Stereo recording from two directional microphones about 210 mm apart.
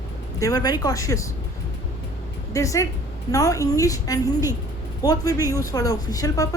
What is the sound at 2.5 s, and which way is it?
A woman's voice, 15° left (ahead or behind).